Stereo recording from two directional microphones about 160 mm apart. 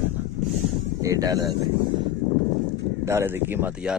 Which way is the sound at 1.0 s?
20° right (ahead or behind).